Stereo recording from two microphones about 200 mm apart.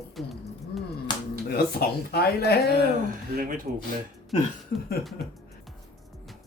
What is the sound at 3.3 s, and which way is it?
Speech, 45° right (ahead or behind).